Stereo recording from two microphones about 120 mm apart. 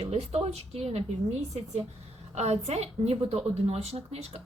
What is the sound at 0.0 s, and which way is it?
Speech, 60° right (ahead or behind).